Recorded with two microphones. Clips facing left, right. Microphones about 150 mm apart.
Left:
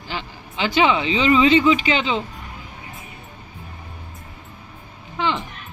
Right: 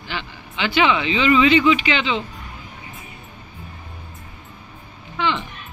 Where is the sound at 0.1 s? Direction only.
40° left (ahead or behind).